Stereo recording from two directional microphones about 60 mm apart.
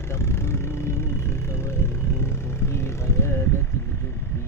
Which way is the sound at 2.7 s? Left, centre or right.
Left.